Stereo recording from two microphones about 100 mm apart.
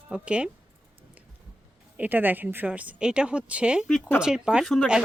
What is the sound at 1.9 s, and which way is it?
A woman's voice, 20° right (ahead or behind).